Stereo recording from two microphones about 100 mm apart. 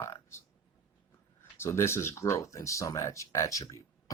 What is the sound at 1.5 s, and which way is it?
Speech, 25° left (ahead or behind).